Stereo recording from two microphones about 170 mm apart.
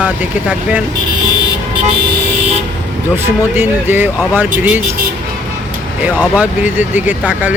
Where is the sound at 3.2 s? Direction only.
10° right (ahead or behind).